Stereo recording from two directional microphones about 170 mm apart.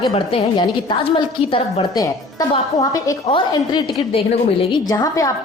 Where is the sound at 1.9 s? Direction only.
20° left (ahead or behind).